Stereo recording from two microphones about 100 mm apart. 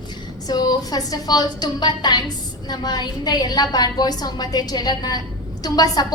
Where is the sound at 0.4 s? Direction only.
40° left (ahead or behind).